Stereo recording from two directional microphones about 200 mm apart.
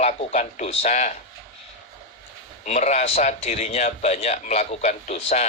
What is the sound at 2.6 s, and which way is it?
A man's voice, 35° left (ahead or behind).